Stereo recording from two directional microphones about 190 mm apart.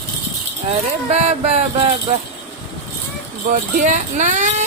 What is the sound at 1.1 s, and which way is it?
Speech, 35° right (ahead or behind).